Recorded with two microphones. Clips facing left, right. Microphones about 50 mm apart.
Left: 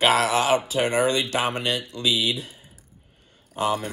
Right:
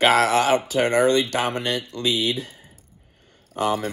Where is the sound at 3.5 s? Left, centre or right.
Right.